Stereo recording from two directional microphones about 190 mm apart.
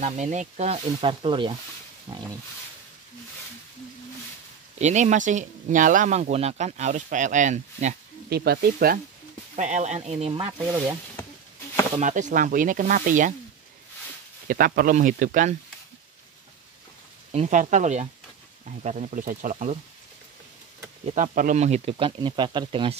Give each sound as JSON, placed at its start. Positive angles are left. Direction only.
{"t": 0.0, "sound": "speech", "side_deg": -40}
{"t": 4.7, "sound": "speech", "side_deg": -40}
{"t": 8.3, "sound": "speech", "side_deg": -55}
{"t": 9.6, "sound": "speech", "side_deg": -40}
{"t": 12.0, "sound": "speech", "side_deg": -40}
{"t": 14.5, "sound": "speech", "side_deg": -50}
{"t": 17.3, "sound": "speech", "side_deg": -40}
{"t": 21.0, "sound": "speech", "side_deg": -40}